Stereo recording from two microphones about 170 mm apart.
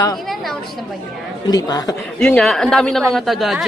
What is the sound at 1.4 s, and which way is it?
Speech, 20° left (ahead or behind).